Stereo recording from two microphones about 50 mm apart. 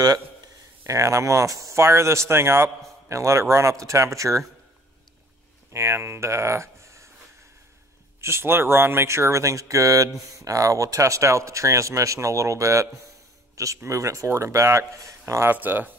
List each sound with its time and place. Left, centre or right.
0.8 s speech: right
1.7 s a man's voice: right
3.2 s speech: right
5.7 s speech: right
8.2 s speech: right
13.8 s speech: right
15.5 s speech: right